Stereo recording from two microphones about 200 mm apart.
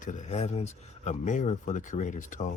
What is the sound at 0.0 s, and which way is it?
Speech, 35° left (ahead or behind).